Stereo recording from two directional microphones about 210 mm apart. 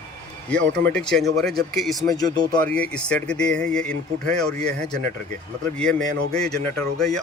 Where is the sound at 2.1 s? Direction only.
20° left (ahead or behind).